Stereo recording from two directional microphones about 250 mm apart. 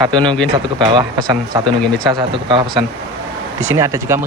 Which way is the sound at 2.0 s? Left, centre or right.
Centre.